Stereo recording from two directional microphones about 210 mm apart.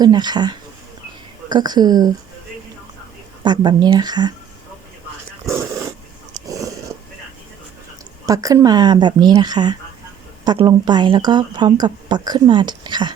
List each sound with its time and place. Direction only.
0.0 s speech: 20° right (ahead or behind)
3.4 s speech: 20° right (ahead or behind)
5.5 s dog: 15° right (ahead or behind)
8.3 s speech: 15° right (ahead or behind)